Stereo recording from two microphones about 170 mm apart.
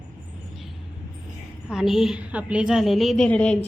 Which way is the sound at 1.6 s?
Centre (ahead or behind).